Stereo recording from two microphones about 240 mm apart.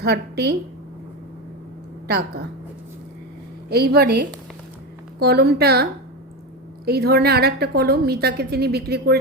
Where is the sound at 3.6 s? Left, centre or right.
Right.